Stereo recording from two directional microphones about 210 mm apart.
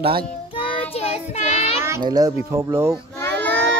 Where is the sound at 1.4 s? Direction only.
30° left (ahead or behind).